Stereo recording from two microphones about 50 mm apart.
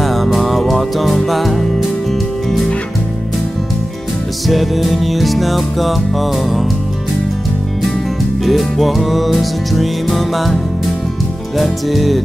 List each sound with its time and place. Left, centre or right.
0.0 s music: centre
4.5 s music: centre
8.5 s music: centre